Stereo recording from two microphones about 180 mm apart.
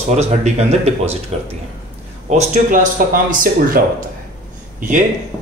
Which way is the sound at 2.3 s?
45° right (ahead or behind).